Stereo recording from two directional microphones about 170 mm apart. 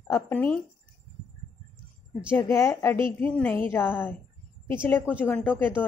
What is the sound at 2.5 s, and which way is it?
Speech, 15° left (ahead or behind).